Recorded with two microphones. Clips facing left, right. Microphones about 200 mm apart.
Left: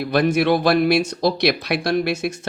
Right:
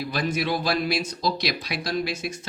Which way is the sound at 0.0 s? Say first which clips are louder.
Left 9 dB; 65° left (ahead or behind).